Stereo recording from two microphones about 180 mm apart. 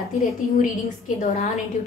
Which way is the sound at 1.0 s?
35° left (ahead or behind).